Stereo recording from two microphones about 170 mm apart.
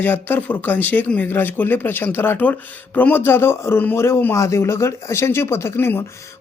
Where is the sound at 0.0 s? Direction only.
10° left (ahead or behind).